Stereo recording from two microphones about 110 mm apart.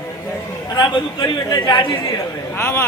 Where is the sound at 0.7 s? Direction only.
40° left (ahead or behind).